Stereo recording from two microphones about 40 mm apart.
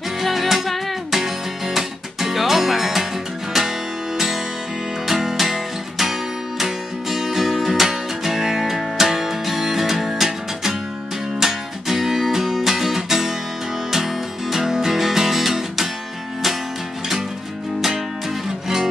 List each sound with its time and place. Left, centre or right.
0.2 s music: centre
5.0 s music: centre
17.7 s music: centre